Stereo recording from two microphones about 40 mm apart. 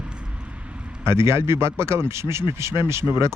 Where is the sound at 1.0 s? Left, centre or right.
Right.